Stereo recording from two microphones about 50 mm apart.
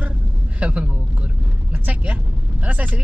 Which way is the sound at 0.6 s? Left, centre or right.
Right.